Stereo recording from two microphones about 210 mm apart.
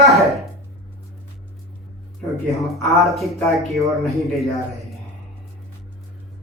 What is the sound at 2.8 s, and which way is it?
Speech, centre (ahead or behind).